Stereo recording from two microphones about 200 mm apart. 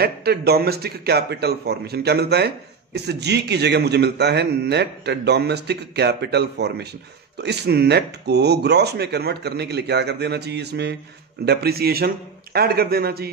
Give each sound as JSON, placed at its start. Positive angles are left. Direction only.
{"t": 0.0, "sound": "a man's voice", "side_deg": -50}